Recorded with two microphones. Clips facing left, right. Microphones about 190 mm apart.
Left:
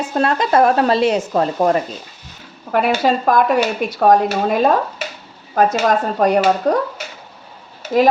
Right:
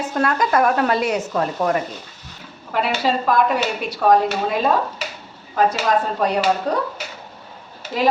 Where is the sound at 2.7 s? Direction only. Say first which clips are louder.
Left 5 dB; 50° left (ahead or behind).